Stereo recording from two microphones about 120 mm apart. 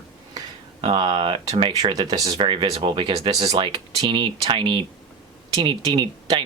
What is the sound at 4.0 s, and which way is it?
Speech, 40° right (ahead or behind).